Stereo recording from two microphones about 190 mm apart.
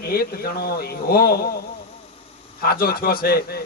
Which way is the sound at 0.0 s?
55° left (ahead or behind).